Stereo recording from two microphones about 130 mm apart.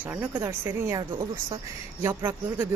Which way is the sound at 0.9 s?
30° right (ahead or behind).